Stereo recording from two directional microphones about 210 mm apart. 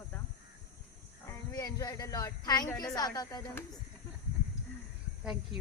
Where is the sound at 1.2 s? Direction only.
15° left (ahead or behind).